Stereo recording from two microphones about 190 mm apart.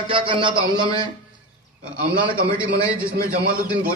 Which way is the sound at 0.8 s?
20° left (ahead or behind).